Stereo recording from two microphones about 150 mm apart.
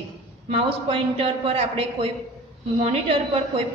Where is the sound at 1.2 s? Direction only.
45° right (ahead or behind).